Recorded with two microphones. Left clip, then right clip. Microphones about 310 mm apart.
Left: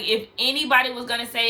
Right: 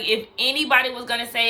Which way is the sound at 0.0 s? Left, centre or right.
Centre.